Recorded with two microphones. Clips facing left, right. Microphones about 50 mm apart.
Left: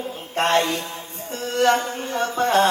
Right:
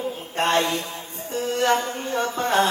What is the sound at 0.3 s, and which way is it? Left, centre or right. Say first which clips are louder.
Mantra: left 2 dB; left.